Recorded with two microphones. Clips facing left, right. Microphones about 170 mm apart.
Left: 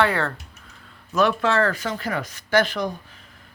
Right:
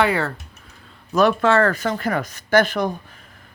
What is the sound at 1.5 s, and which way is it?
Speech, 55° right (ahead or behind).